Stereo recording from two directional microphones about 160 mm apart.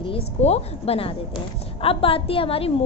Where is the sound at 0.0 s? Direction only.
40° left (ahead or behind).